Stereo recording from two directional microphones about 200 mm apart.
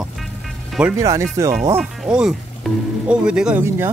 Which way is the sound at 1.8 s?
5° right (ahead or behind).